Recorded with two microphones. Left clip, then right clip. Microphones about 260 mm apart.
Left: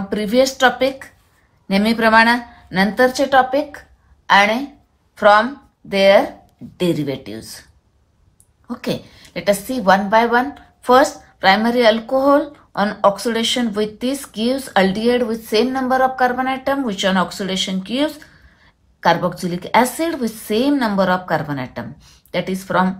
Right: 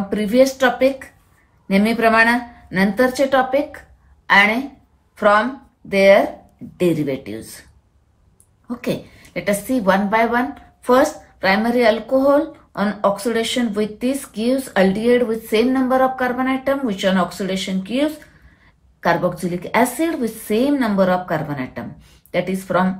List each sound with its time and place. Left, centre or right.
0.1 s a woman's voice: centre
8.6 s a woman's voice: centre
19.0 s a woman's voice: centre